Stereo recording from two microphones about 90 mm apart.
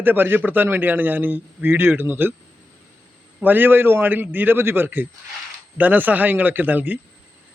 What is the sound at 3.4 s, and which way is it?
A man's voice, 20° right (ahead or behind).